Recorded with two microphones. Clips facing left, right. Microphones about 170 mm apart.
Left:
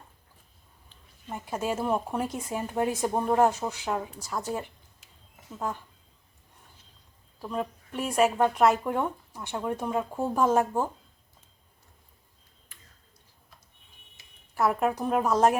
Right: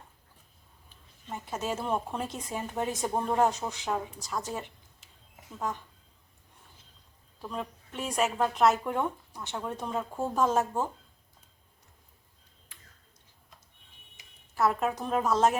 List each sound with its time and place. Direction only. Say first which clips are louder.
1.3 s speech: left 3 dB; 10° left (ahead or behind)
7.4 s speech: left 5 dB; 5° left (ahead or behind)
14.2 s a sound: right 3 dB; 15° right (ahead or behind)
14.5 s speech: left 2 dB; 10° left (ahead or behind)